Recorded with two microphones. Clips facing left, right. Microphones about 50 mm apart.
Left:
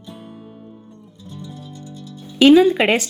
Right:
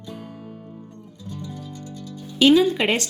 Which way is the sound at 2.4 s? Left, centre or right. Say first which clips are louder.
Left 5 dB; left.